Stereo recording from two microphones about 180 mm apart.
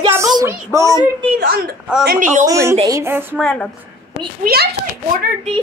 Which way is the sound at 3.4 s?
5° left (ahead or behind).